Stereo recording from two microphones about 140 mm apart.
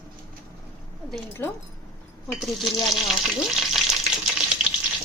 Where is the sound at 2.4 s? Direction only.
Centre (ahead or behind).